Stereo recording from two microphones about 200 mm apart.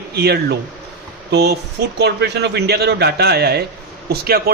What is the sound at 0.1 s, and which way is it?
A man's voice, 55° right (ahead or behind).